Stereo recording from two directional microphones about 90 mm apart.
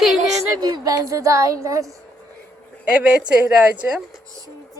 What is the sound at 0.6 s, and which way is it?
Speech, 45° right (ahead or behind).